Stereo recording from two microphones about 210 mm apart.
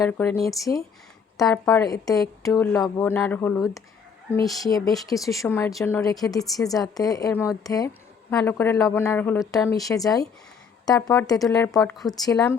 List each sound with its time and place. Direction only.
0.0 s a woman's voice: 10° left (ahead or behind)
9.8 s a woman's voice: 15° left (ahead or behind)
11.8 s speech: centre (ahead or behind)
12.0 s a woman's voice: 20° left (ahead or behind)